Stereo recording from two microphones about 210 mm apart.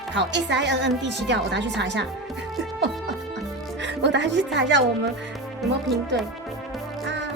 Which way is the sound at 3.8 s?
55° right (ahead or behind).